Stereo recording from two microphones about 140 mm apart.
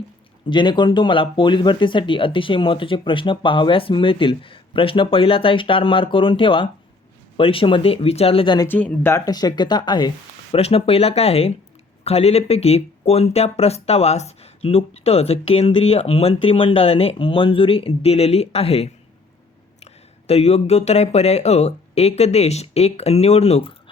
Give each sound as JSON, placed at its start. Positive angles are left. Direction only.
{"t": 0.5, "sound": "speech", "side_deg": 35}
{"t": 8.6, "sound": "speech", "side_deg": 15}
{"t": 10.5, "sound": "speech", "side_deg": 45}